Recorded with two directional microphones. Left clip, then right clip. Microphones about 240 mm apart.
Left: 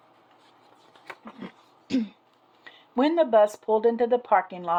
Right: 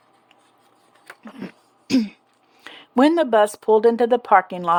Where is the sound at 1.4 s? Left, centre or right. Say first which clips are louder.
Right 6 dB; right.